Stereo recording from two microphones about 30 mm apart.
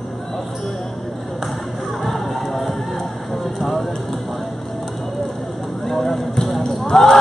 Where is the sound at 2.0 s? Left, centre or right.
Centre.